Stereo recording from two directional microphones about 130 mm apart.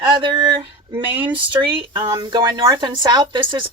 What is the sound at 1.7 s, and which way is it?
Speech, 35° right (ahead or behind).